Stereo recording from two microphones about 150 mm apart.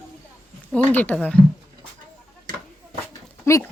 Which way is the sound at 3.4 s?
20° left (ahead or behind).